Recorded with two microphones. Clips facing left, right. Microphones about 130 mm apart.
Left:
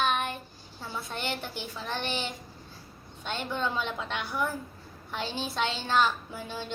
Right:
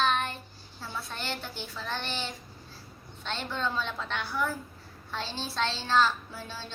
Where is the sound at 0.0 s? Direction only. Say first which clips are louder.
Even; 15° left (ahead or behind).